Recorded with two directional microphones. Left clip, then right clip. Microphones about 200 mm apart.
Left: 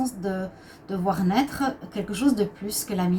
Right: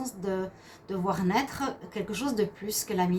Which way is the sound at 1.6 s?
45° right (ahead or behind).